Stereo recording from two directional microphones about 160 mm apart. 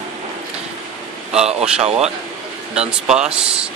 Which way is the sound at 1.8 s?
40° right (ahead or behind).